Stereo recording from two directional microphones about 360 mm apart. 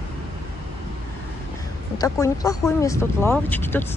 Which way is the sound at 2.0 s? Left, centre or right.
Centre.